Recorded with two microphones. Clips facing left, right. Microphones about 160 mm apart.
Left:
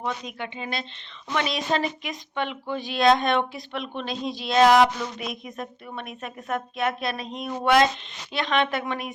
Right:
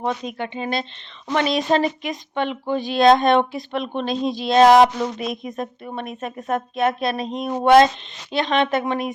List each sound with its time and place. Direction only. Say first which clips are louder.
0.0 s a woman's voice: right 6 dB; 40° right (ahead or behind)
5.2 s speech: right 7 dB; 25° right (ahead or behind)
5.5 s a woman's voice: right 6 dB; 40° right (ahead or behind)
6.7 s speech: right 7 dB; 25° right (ahead or behind)
8.6 s a woman's voice: right 6 dB; 40° right (ahead or behind)